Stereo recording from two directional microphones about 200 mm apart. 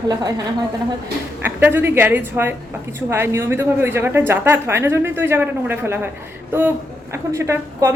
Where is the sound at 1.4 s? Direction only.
10° right (ahead or behind).